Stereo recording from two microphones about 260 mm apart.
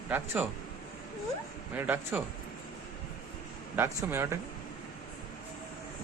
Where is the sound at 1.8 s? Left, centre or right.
Centre.